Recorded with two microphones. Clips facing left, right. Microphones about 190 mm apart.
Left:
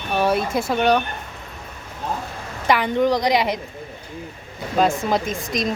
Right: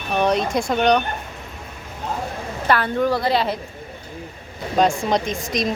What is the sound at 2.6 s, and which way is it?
Speech, 15° left (ahead or behind).